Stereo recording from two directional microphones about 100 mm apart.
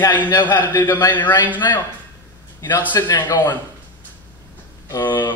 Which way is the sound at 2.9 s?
45° left (ahead or behind).